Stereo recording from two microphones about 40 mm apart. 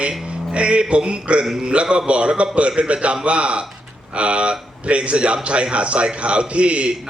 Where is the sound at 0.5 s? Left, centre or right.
Right.